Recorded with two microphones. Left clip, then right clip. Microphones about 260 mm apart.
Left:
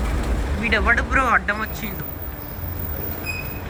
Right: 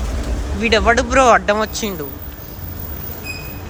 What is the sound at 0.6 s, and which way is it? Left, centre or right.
Speech, centre.